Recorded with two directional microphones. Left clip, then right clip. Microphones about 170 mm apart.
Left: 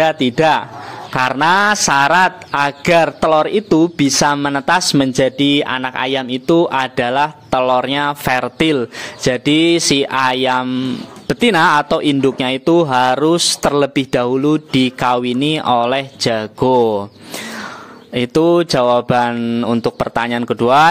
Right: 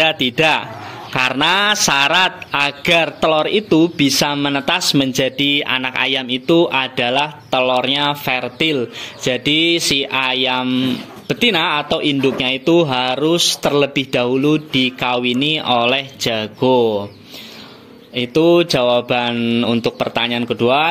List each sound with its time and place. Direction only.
0.4 s a sound: 10° left (ahead or behind)
6.4 s a man's voice: 20° left (ahead or behind)
11.9 s a man's voice: 35° left (ahead or behind)
18.2 s a man's voice: 35° left (ahead or behind)